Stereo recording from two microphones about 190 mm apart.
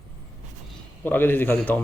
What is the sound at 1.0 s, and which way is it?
Speech, 10° left (ahead or behind).